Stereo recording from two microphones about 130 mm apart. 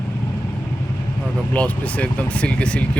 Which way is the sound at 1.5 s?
10° left (ahead or behind).